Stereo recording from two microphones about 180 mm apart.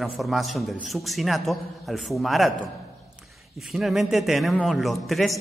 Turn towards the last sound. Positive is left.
turn(degrees=0)  # may be behind; listen again after turning